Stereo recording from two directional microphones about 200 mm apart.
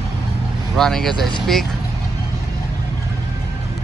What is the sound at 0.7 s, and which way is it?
Speech, centre (ahead or behind).